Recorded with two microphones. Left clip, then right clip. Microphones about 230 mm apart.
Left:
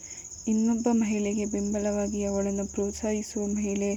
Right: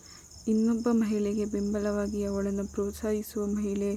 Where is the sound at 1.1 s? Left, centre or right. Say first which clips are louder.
Even; right.